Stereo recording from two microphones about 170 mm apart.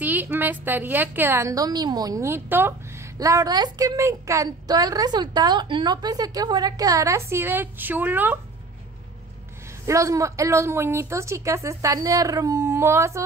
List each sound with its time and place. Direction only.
0.0 s a woman's voice: 10° right (ahead or behind)
9.8 s a woman's voice: 20° right (ahead or behind)